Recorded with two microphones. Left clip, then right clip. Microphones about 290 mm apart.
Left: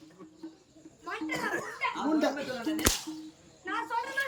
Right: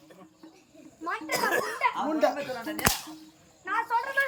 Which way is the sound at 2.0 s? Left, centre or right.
Centre.